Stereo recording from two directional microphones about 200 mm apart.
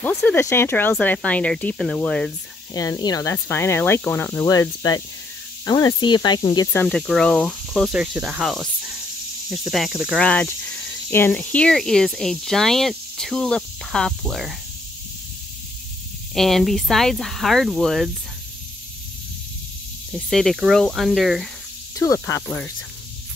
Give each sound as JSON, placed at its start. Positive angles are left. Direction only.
{"t": 0.0, "sound": "speech", "side_deg": 10}
{"t": 2.7, "sound": "speech", "side_deg": 20}
{"t": 6.7, "sound": "speech", "side_deg": 5}
{"t": 16.3, "sound": "speech", "side_deg": 0}
{"t": 20.1, "sound": "speech", "side_deg": 0}
{"t": 21.9, "sound": "speech", "side_deg": 15}